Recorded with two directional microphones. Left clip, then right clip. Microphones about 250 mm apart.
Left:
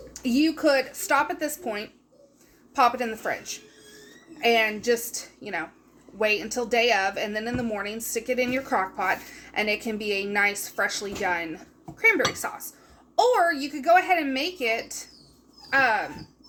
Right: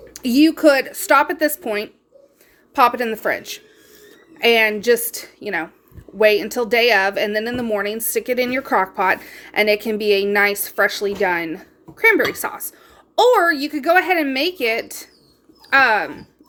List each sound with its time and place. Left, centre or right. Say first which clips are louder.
0.1 s speech: right 8 dB; right